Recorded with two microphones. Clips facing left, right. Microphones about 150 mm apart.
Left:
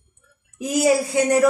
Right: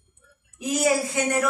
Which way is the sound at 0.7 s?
35° left (ahead or behind).